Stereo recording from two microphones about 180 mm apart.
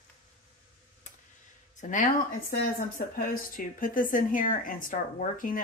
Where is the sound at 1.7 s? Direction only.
45° left (ahead or behind).